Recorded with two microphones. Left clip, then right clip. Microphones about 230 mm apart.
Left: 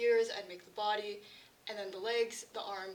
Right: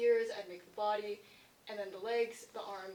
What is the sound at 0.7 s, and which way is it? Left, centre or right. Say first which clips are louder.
Speech: even; left.